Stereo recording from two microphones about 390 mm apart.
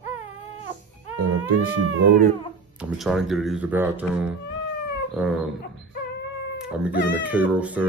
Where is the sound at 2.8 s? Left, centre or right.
Centre.